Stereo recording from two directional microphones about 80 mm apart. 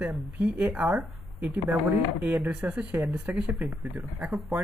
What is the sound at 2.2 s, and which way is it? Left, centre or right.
Speech, right.